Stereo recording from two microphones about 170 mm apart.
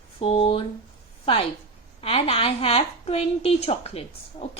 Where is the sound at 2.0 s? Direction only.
35° left (ahead or behind).